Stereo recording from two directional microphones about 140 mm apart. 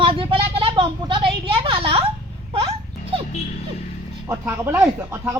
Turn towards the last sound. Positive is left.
turn(degrees=-20)  # may be behind; listen again after turning